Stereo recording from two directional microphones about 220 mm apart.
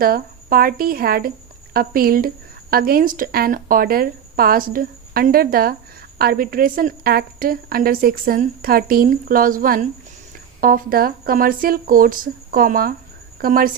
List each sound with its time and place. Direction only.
0.0 s a woman's voice: 40° right (ahead or behind)